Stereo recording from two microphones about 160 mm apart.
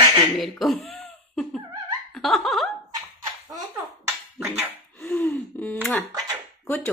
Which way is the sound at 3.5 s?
25° right (ahead or behind).